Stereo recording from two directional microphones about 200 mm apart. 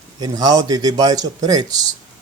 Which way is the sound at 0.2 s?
20° right (ahead or behind).